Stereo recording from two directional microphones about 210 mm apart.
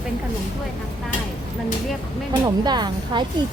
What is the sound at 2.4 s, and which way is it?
Speech, 20° right (ahead or behind).